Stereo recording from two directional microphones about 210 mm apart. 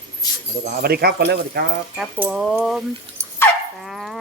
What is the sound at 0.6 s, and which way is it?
Speech, 45° right (ahead or behind).